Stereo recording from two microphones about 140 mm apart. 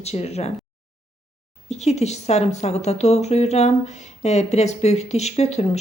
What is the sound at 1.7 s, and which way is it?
A woman's voice, 50° left (ahead or behind).